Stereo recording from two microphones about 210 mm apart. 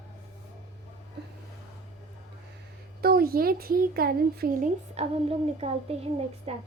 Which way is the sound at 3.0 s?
45° right (ahead or behind).